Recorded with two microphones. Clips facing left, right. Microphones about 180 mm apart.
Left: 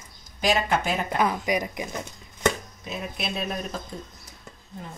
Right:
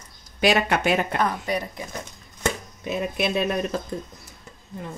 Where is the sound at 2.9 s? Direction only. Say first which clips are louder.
Right 8 dB; 60° right (ahead or behind).